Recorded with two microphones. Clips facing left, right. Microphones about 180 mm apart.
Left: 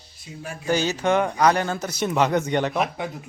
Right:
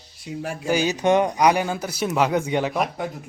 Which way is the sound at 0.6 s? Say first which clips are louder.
Right 2 dB; 10° right (ahead or behind).